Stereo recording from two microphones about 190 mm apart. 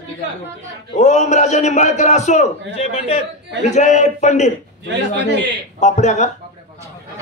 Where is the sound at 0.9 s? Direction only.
40° left (ahead or behind).